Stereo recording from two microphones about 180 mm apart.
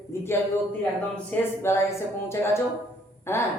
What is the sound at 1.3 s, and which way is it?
A man's voice, 15° left (ahead or behind).